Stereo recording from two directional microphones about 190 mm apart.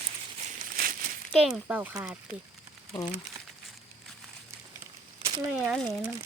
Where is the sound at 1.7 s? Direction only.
10° right (ahead or behind).